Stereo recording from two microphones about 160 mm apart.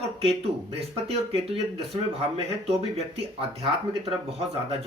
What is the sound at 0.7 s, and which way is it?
Speech, 40° right (ahead or behind).